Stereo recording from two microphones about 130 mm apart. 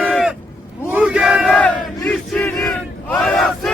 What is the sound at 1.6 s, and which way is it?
Battle cry, 10° left (ahead or behind).